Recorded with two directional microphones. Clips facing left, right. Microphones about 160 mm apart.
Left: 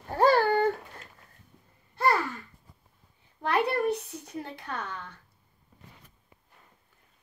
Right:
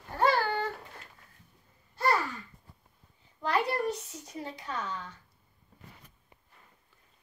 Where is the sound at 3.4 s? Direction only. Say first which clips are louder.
Left 3 dB; 60° left (ahead or behind).